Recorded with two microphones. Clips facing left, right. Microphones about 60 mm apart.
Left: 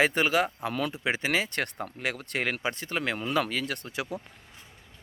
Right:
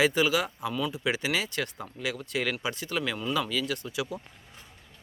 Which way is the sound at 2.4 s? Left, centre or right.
Left.